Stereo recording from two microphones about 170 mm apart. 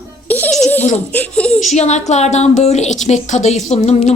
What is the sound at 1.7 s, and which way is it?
Speech, 40° left (ahead or behind).